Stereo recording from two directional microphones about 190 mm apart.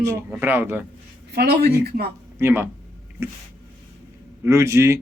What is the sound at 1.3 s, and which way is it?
Speech, 60° right (ahead or behind).